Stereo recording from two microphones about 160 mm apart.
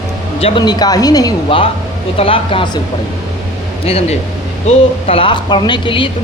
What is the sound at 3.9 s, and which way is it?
Speech, 40° left (ahead or behind).